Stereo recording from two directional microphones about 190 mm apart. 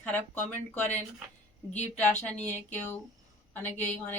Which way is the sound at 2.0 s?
10° left (ahead or behind).